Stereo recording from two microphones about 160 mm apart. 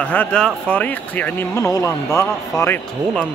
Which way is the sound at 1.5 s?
20° left (ahead or behind).